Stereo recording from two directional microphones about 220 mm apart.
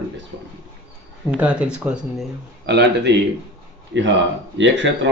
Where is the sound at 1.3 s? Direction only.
5° right (ahead or behind).